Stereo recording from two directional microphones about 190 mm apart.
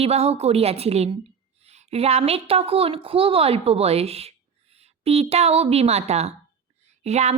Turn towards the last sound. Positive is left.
turn(degrees=-35)  # may be behind; listen again after turning